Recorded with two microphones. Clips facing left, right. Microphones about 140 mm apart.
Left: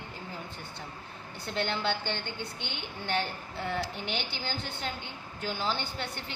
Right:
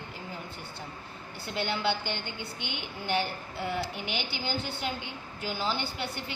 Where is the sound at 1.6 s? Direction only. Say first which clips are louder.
Right 1 dB; 5° right (ahead or behind).